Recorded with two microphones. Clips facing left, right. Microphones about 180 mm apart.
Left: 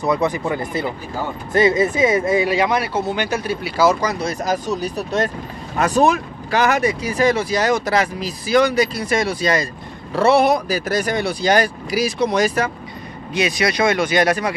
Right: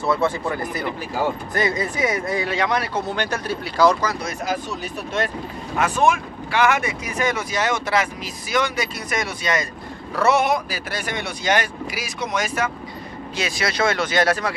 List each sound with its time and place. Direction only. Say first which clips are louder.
0.0 s speech: left 2 dB; 20° left (ahead or behind)
2.4 s speech: left 4 dB; 10° left (ahead or behind)
4.1 s speech: left 5 dB; 30° left (ahead or behind)
4.5 s speech: left 5 dB; 40° left (ahead or behind)
13.3 s speech: left 6 dB; 15° left (ahead or behind)